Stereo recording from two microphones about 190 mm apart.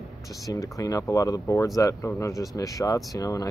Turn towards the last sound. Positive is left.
turn(degrees=20)  # may be behind; listen again after turning